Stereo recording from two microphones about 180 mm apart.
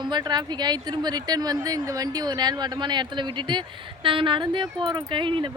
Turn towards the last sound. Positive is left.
turn(degrees=-25)  # may be behind; listen again after turning